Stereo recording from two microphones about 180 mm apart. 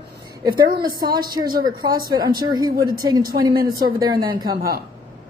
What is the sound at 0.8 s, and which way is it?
A woman's voice, 25° right (ahead or behind).